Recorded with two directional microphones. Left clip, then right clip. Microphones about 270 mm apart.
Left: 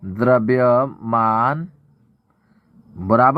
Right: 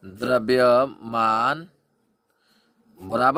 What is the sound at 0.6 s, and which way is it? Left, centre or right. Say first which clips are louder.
Speech: left 2 dB; right.